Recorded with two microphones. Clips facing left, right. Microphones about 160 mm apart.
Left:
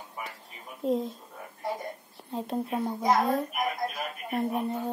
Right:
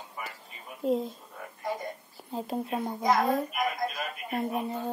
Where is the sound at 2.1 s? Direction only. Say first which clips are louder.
Left 1 dB; centre (ahead or behind).